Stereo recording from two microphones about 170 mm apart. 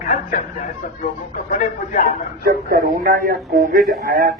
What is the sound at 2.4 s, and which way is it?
Speech, 60° right (ahead or behind).